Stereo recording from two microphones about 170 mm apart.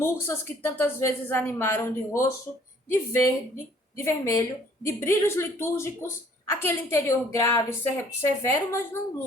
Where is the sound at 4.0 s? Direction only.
15° left (ahead or behind).